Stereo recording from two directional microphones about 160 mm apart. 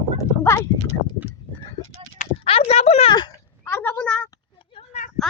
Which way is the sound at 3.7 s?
15° left (ahead or behind).